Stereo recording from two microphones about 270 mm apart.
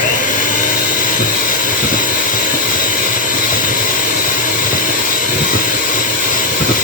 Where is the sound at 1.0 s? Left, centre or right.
Left.